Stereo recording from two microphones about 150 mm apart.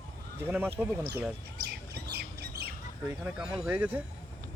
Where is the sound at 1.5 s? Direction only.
90° right.